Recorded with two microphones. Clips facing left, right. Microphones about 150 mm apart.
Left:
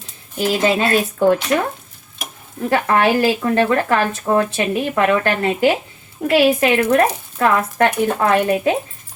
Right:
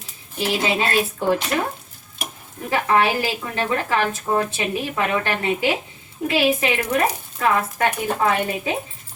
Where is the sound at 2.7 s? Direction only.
60° left (ahead or behind).